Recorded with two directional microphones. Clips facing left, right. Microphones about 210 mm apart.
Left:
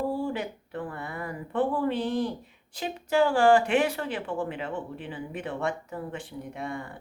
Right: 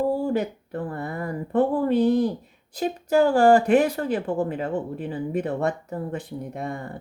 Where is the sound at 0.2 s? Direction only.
40° right (ahead or behind).